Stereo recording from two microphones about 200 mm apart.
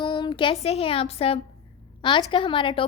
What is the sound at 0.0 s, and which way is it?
A woman's voice, 20° left (ahead or behind).